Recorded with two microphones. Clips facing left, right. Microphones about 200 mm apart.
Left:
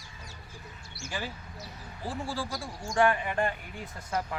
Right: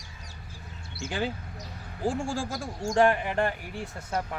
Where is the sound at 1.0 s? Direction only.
60° right (ahead or behind).